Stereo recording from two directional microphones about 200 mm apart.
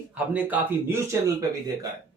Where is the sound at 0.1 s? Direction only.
10° right (ahead or behind).